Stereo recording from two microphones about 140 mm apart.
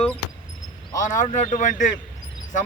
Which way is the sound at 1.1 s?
60° left (ahead or behind).